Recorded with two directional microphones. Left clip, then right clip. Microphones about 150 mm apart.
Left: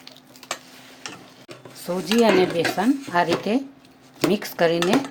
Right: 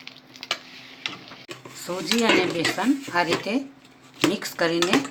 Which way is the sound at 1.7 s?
65° left (ahead or behind).